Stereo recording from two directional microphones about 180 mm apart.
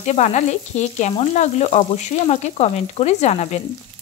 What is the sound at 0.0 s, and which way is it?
Frying, 40° left (ahead or behind).